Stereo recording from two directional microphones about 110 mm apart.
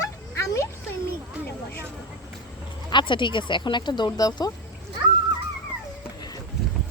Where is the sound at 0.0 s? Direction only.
30° left (ahead or behind).